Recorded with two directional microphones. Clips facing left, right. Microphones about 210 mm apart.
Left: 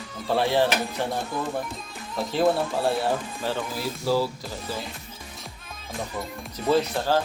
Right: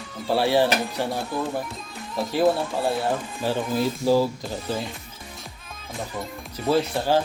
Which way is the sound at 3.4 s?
15° right (ahead or behind).